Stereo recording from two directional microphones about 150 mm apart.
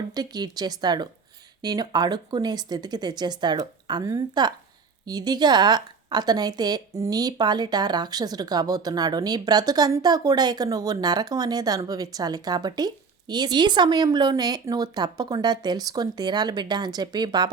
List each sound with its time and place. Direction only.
0.1 s a woman's voice: 25° right (ahead or behind)